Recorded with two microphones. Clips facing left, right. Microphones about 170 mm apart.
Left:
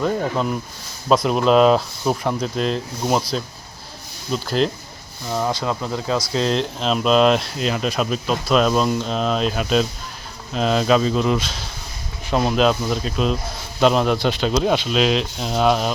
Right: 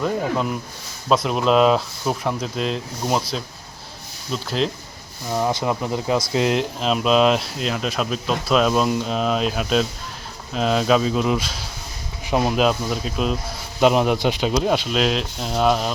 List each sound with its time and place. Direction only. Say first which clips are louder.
0.0 s speech: left 1 dB; centre (ahead or behind)
4.3 s speech: left 3 dB; centre (ahead or behind)
5.3 s speech: right 1 dB; 15° right (ahead or behind)